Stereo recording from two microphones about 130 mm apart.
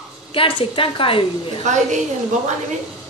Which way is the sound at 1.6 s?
65° right (ahead or behind).